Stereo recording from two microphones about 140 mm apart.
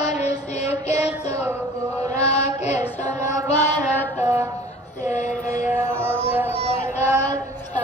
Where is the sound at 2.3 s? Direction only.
50° left (ahead or behind).